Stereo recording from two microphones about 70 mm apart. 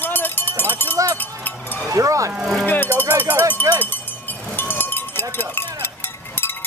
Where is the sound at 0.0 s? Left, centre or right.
Left.